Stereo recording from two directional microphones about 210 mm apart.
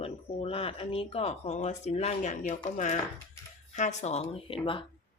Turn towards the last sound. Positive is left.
turn(degrees=25)  # may be behind; listen again after turning